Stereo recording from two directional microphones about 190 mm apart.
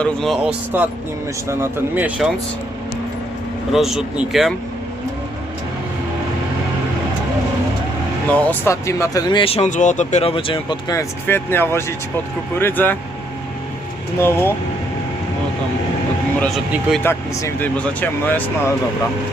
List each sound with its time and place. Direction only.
0.0 s speech: centre (ahead or behind)
0.7 s speech: 10° right (ahead or behind)
3.7 s speech: centre (ahead or behind)
8.3 s speech: 10° left (ahead or behind)
14.2 s speech: 15° left (ahead or behind)
16.9 s speech: 10° left (ahead or behind)